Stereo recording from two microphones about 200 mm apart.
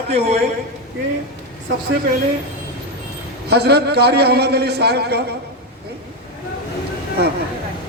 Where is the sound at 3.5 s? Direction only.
55° right (ahead or behind).